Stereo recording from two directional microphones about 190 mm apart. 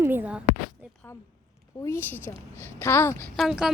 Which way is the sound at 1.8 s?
15° left (ahead or behind).